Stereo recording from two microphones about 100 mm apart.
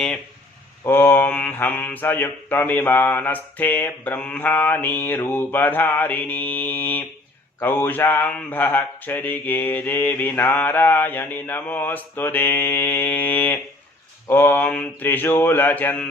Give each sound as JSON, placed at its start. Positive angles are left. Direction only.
{"t": 0.9, "sound": "mantra", "side_deg": 20}